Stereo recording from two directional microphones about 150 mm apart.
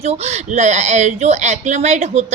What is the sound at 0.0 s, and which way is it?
Speech, 45° right (ahead or behind).